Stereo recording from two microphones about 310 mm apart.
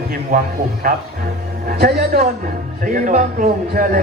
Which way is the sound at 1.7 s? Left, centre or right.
Right.